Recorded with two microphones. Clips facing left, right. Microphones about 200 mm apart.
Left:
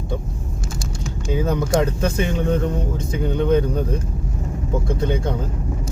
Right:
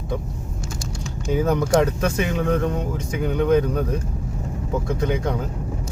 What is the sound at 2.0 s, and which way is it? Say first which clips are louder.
Speech: left 1 dB; 25° left (ahead or behind).